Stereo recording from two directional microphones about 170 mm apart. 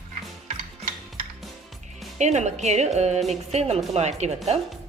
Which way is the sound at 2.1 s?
45° right (ahead or behind).